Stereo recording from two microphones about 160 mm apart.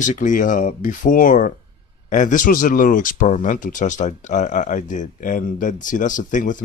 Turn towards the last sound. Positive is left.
turn(degrees=55)  # may be behind; listen again after turning